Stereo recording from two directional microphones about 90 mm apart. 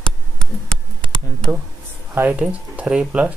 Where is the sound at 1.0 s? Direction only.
65° right (ahead or behind).